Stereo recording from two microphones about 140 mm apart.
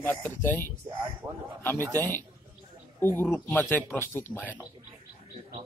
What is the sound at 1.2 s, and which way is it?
Speech, 20° right (ahead or behind).